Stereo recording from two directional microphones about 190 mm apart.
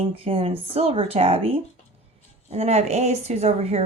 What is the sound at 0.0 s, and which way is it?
A woman's voice, 30° right (ahead or behind).